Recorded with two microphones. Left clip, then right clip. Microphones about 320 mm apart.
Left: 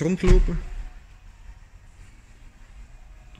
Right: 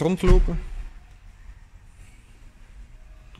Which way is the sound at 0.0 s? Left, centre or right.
Centre.